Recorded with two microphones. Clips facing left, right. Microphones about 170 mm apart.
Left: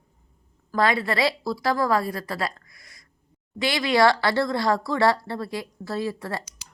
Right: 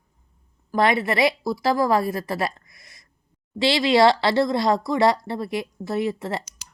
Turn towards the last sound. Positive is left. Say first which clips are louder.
# right 3 dB
turn(degrees=-20)  # may be behind; listen again after turning